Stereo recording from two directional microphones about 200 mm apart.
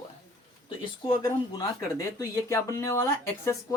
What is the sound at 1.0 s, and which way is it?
Speech, 20° left (ahead or behind).